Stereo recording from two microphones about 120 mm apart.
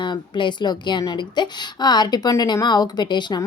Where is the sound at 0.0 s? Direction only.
40° left (ahead or behind).